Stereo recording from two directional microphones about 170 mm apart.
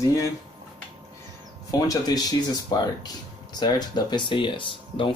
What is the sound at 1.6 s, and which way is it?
Speech, 20° left (ahead or behind).